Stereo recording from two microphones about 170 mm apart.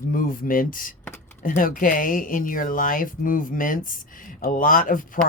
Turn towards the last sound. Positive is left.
turn(degrees=55)  # may be behind; listen again after turning